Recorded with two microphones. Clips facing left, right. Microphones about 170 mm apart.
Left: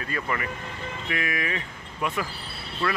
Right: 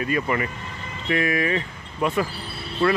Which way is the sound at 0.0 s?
20° right (ahead or behind).